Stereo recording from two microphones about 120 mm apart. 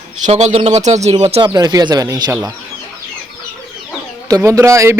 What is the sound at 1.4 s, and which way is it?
Speech, 35° right (ahead or behind).